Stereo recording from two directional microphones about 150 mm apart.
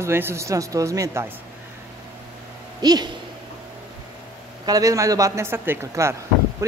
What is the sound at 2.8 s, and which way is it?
Speech, 25° right (ahead or behind).